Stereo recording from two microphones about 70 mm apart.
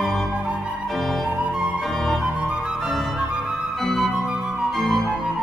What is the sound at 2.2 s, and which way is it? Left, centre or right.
Music, centre.